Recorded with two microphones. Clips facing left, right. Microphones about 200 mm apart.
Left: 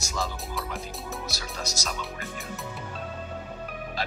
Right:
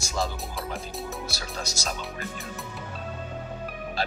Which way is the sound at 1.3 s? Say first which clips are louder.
Even; 30° right (ahead or behind).